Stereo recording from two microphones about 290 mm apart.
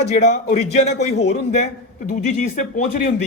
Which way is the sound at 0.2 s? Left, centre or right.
Left.